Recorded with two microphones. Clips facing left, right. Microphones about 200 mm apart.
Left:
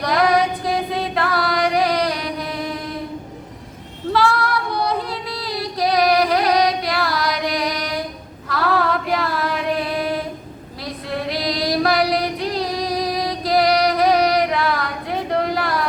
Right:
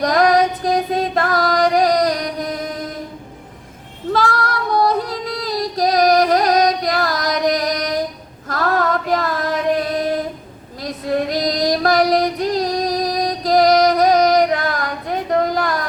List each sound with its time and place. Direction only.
0.0 s music: 45° right (ahead or behind)
4.1 s female singing: 45° right (ahead or behind)